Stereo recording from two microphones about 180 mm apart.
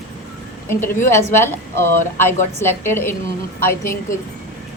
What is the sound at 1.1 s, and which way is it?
A woman's voice, 15° left (ahead or behind).